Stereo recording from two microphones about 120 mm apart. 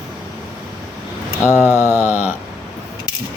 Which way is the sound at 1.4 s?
15° right (ahead or behind).